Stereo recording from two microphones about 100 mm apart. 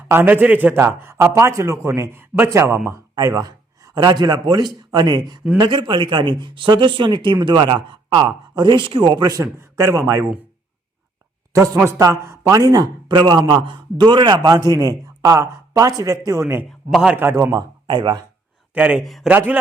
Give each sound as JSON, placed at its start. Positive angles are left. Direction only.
{"t": 0.1, "sound": "a man's voice", "side_deg": -20}
{"t": 11.9, "sound": "speech", "side_deg": -30}
{"t": 16.6, "sound": "a man's voice", "side_deg": -5}
{"t": 17.2, "sound": "a man's voice", "side_deg": -20}
{"t": 17.8, "sound": "speech", "side_deg": -50}
{"t": 18.7, "sound": "speech", "side_deg": -15}
{"t": 19.0, "sound": "a man's voice", "side_deg": 0}
{"t": 19.3, "sound": "speech", "side_deg": -20}